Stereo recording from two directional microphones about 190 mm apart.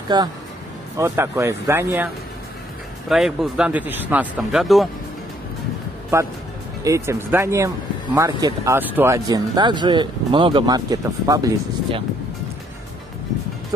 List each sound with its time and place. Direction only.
0.1 s speech: 20° right (ahead or behind)
3.1 s speech: centre (ahead or behind)
6.1 s speech: 15° right (ahead or behind)